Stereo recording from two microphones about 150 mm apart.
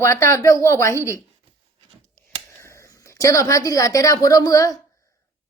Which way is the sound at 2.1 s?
20° left (ahead or behind).